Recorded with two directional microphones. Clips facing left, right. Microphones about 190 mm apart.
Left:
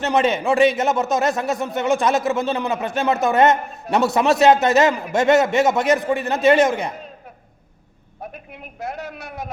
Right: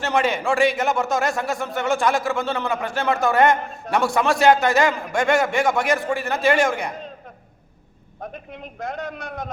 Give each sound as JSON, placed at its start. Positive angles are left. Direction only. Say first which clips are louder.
{"t": 0.0, "sound": "speech", "louder": "left 3 dB", "side_deg": 20}
{"t": 8.2, "sound": "a man's voice", "louder": "right 1 dB", "side_deg": 5}